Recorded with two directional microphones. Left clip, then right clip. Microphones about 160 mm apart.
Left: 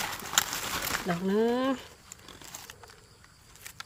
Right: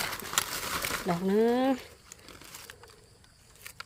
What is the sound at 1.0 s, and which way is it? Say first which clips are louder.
Speech: right 2 dB; 25° right (ahead or behind).